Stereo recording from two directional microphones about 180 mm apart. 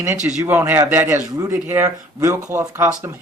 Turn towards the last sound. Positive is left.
turn(degrees=-15)  # may be behind; listen again after turning